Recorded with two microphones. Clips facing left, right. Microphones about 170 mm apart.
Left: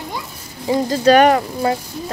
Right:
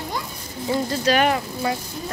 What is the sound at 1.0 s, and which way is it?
Speech, 50° left (ahead or behind).